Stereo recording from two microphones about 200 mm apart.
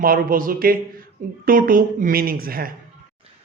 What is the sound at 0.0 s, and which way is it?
A woman's voice, 45° right (ahead or behind).